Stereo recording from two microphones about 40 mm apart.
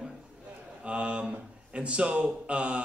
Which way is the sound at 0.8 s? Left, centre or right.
Right.